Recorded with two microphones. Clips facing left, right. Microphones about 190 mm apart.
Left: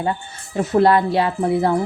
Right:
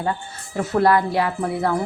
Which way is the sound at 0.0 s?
20° left (ahead or behind).